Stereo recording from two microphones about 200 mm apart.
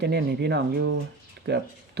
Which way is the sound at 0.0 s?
55° right (ahead or behind).